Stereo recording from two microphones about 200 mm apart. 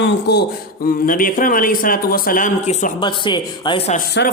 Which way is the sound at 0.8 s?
45° left (ahead or behind).